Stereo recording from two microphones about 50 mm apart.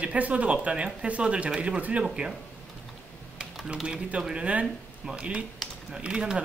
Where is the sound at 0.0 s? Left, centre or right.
Right.